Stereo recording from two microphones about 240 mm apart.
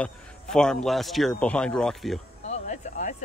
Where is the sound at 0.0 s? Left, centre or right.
Centre.